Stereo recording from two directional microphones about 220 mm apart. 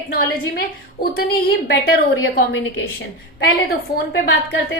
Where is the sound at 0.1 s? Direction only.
45° left (ahead or behind).